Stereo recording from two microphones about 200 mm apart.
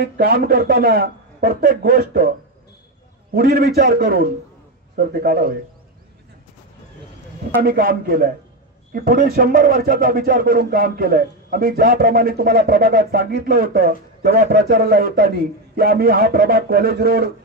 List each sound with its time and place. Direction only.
0.0 s a man's voice: 50° right (ahead or behind)
3.3 s a man's voice: 50° right (ahead or behind)
7.6 s a man's voice: 45° right (ahead or behind)